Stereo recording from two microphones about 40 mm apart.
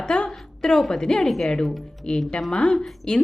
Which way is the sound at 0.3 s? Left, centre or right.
Centre.